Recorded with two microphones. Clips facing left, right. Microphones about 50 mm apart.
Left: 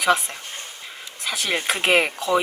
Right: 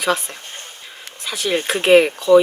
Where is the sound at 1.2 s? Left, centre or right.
Centre.